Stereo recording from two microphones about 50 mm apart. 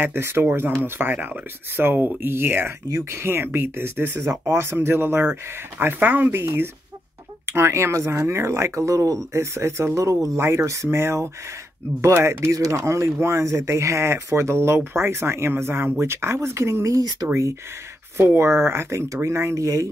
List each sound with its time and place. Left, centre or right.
0.0 s speech: right
7.4 s speech: right
12.0 s speech: right